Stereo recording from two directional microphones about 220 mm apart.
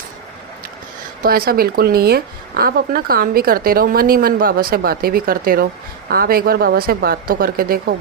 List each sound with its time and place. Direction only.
1.2 s a woman's voice: 45° right (ahead or behind)